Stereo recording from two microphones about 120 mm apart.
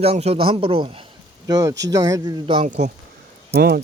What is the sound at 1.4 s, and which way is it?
Speech, 30° right (ahead or behind).